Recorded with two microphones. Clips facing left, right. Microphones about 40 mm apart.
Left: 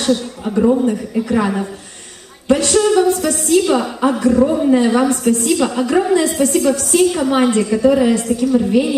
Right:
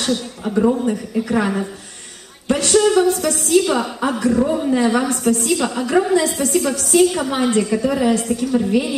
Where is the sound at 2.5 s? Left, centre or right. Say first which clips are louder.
Left 5 dB; left.